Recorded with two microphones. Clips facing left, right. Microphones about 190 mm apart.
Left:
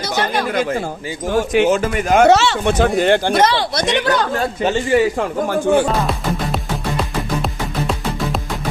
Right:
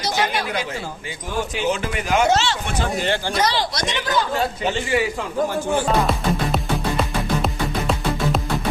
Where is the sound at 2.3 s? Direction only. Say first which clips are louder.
Left 7 dB; 60° left (ahead or behind).